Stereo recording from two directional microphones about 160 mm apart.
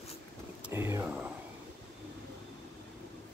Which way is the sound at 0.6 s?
15° right (ahead or behind).